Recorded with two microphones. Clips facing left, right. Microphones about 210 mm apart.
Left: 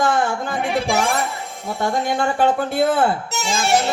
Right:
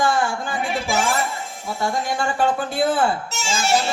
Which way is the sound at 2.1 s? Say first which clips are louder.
Left 4 dB; 60° left (ahead or behind).